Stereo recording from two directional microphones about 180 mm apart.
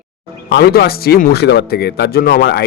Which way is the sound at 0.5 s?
60° left (ahead or behind).